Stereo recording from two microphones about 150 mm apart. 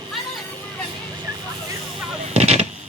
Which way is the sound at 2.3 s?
45° right (ahead or behind).